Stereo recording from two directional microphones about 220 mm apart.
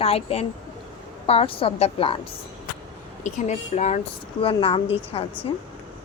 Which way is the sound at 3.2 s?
35° left (ahead or behind).